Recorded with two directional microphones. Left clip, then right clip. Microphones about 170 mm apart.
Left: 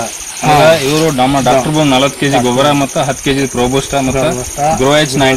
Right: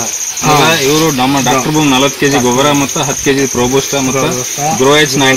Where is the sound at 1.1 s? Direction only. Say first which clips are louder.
Left 1 dB; 25° left (ahead or behind).